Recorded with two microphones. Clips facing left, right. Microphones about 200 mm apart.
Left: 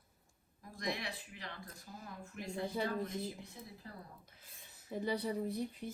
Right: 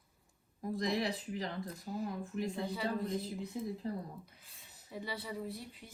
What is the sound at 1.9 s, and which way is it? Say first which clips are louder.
Speech: right 13 dB; 45° right (ahead or behind).